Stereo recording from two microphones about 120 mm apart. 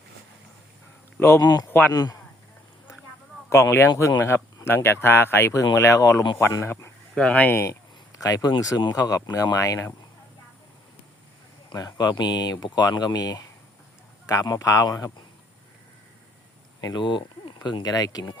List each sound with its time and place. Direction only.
1.4 s speech: 30° left (ahead or behind)
3.5 s speech: 20° left (ahead or behind)
7.2 s speech: 10° left (ahead or behind)
7.6 s speech: 25° left (ahead or behind)
11.7 s speech: 30° left (ahead or behind)
16.8 s speech: 40° left (ahead or behind)